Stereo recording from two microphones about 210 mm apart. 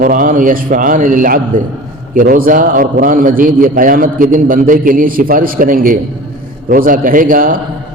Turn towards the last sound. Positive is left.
turn(degrees=-40)  # may be behind; listen again after turning